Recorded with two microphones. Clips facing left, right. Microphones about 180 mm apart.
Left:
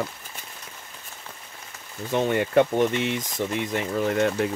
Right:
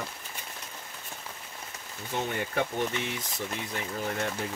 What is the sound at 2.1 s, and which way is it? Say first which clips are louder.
Speech: left 10 dB; 85° left.